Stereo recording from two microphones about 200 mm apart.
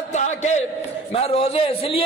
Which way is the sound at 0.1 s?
35° left (ahead or behind).